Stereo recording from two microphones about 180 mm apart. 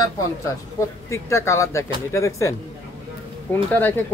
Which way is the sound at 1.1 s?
15° left (ahead or behind).